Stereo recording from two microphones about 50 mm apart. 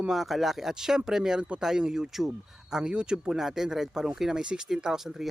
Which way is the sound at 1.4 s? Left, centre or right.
Right.